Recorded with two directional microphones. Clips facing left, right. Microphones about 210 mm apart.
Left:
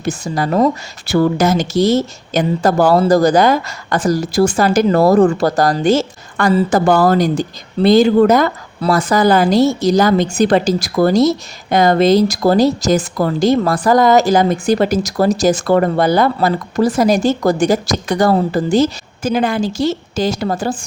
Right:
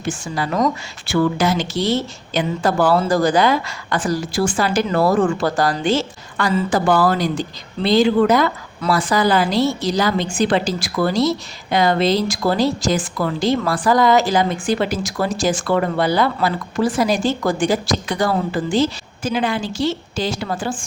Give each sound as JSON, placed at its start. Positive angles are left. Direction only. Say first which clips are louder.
{"t": 0.0, "sound": "speech", "louder": "left 5 dB", "side_deg": 40}